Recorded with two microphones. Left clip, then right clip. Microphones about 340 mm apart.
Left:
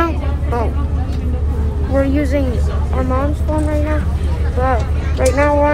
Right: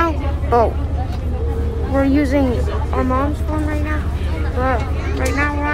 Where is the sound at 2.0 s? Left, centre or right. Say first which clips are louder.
Even; centre.